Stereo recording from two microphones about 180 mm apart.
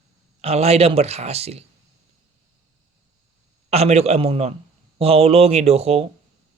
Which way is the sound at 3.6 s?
35° right (ahead or behind).